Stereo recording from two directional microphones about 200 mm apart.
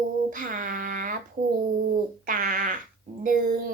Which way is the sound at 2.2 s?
40° right (ahead or behind).